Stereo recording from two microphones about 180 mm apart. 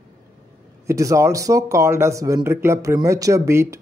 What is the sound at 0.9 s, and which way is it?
Speech, 15° right (ahead or behind).